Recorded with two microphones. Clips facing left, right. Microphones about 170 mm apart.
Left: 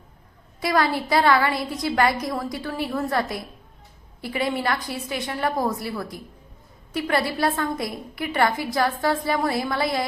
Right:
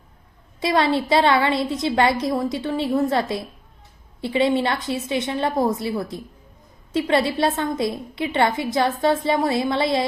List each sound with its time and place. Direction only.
0.6 s a woman's voice: 25° right (ahead or behind)